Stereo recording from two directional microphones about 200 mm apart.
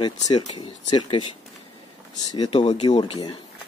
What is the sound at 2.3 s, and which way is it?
Speech, 25° left (ahead or behind).